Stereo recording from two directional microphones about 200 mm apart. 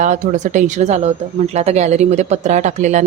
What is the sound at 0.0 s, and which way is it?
A woman's voice, 40° right (ahead or behind).